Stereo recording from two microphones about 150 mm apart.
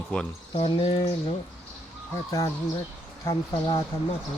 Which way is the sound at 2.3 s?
20° left (ahead or behind).